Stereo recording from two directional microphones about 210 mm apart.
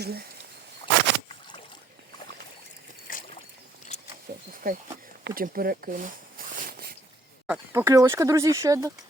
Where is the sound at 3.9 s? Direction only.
35° left (ahead or behind).